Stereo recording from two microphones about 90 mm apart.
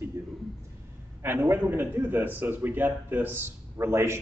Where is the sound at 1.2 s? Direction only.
25° right (ahead or behind).